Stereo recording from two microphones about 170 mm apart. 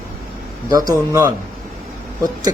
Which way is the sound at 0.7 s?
20° right (ahead or behind).